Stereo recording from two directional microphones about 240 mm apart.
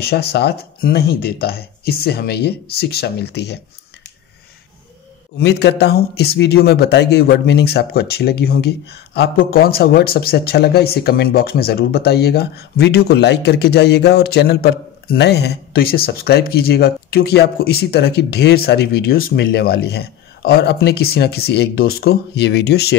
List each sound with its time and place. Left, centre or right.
0.0 s speech: left
5.4 s speech: left